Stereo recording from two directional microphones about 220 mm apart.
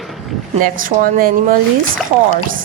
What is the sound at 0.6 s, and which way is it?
Speech, 40° right (ahead or behind).